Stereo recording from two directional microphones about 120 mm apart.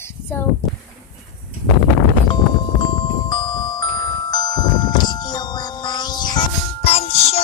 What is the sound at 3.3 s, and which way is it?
Music, 35° left (ahead or behind).